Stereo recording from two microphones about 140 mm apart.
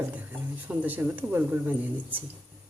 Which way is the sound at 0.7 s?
10° right (ahead or behind).